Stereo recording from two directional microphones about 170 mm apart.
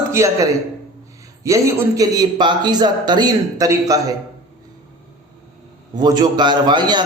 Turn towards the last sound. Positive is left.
turn(degrees=-25)  # may be behind; listen again after turning